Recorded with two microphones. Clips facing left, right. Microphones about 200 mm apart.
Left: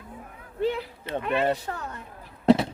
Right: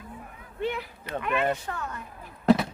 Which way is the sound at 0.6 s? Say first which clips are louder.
Left 4 dB; 30° left (ahead or behind).